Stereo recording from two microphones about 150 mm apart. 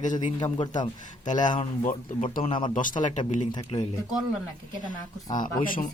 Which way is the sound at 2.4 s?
35° left (ahead or behind).